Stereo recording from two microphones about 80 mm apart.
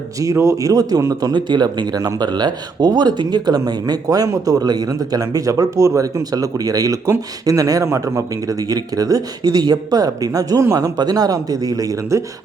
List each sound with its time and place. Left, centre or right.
0.2 s speech: right
1.3 s speech: right